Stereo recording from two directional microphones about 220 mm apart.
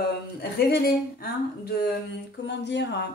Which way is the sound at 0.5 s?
45° left (ahead or behind).